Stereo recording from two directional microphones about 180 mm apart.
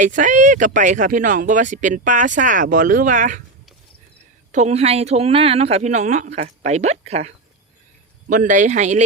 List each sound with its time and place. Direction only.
0.0 s speech: 45° right (ahead or behind)
4.5 s speech: 40° right (ahead or behind)